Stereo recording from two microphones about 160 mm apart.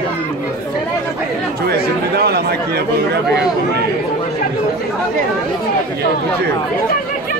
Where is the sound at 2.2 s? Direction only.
80° right.